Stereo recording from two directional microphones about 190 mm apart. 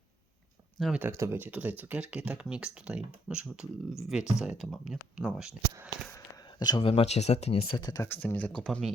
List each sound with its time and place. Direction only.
0.8 s speech: centre (ahead or behind)
1.0 s speech: 15° right (ahead or behind)
6.1 s speech: 15° left (ahead or behind)
8.0 s speech: 10° left (ahead or behind)